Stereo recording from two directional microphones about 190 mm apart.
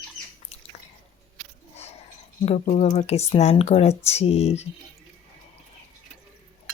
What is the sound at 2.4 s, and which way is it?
Speech, 35° left (ahead or behind).